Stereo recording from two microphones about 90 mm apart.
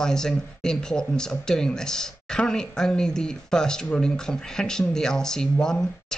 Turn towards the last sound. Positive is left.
turn(degrees=10)  # may be behind; listen again after turning